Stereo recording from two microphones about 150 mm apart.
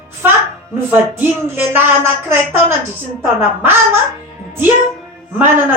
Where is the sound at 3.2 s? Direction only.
15° right (ahead or behind).